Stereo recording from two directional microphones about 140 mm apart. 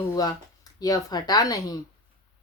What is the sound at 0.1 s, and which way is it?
Speech, 25° left (ahead or behind).